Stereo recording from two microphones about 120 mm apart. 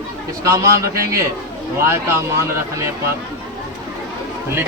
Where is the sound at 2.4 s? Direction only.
25° right (ahead or behind).